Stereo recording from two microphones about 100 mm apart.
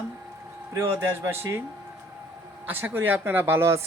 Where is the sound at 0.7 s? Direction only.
25° right (ahead or behind).